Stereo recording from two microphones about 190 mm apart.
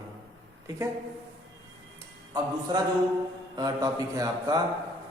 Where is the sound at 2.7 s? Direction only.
25° right (ahead or behind).